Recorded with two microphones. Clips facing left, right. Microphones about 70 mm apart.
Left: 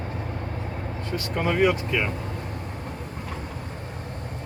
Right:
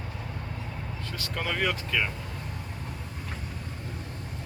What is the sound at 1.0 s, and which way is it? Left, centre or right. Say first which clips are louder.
Speech: left 7 dB; left.